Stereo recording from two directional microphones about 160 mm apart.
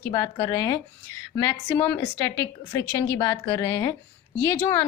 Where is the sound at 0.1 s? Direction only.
20° left (ahead or behind).